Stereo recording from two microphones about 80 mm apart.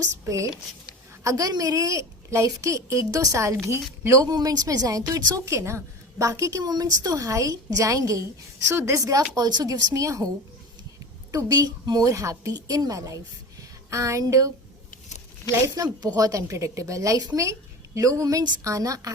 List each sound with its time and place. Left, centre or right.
0.0 s a woman's voice: right
8.6 s a woman's voice: right
9.3 s speech: right
9.6 s a woman's voice: right
11.3 s a woman's voice: right
13.9 s a woman's voice: right
15.6 s a woman's voice: right